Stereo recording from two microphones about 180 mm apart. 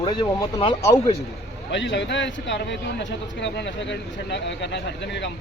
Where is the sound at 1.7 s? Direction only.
80° left.